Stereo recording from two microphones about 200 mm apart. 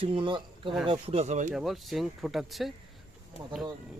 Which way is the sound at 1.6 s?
Centre (ahead or behind).